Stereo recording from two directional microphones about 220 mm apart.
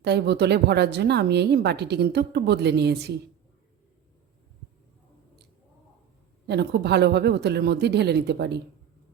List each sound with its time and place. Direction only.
0.0 s speech: 50° right (ahead or behind)
6.5 s speech: 50° right (ahead or behind)